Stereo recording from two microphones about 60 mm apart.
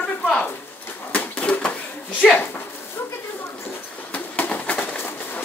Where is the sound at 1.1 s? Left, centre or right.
Left.